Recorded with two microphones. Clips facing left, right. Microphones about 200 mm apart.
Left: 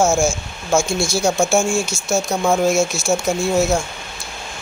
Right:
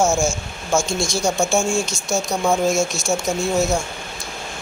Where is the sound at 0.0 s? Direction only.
5° left (ahead or behind).